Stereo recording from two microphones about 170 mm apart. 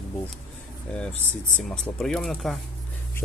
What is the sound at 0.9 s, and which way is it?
Speech, 5° left (ahead or behind).